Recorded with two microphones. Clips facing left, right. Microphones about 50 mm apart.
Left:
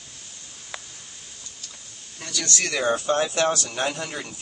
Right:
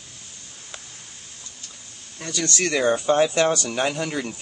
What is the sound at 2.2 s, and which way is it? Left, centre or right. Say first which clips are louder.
Speech: right 3 dB; right.